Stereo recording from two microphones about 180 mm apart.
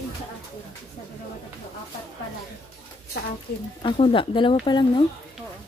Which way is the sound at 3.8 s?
30° left (ahead or behind).